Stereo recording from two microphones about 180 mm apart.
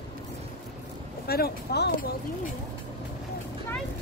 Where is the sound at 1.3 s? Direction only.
60° left (ahead or behind).